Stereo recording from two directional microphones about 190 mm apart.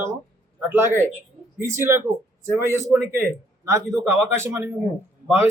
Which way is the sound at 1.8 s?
15° right (ahead or behind).